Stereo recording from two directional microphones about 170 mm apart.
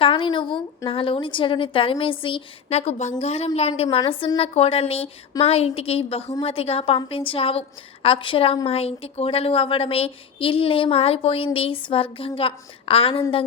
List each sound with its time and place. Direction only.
0.0 s a woman's voice: 30° left (ahead or behind)